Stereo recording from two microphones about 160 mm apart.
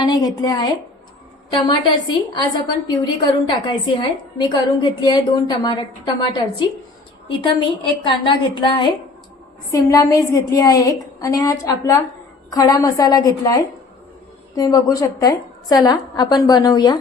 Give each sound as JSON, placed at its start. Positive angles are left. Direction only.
{"t": 0.0, "sound": "a woman's voice", "side_deg": 25}
{"t": 7.3, "sound": "a woman's voice", "side_deg": 30}